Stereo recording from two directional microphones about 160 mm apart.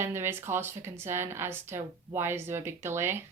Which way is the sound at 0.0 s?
15° right (ahead or behind).